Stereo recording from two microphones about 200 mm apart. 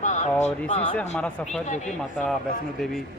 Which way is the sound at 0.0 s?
35° left (ahead or behind).